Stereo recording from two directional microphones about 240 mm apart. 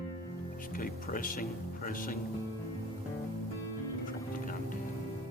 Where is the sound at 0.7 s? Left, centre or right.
Left.